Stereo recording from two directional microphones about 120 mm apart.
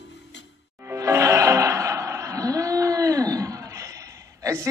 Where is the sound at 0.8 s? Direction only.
25° right (ahead or behind).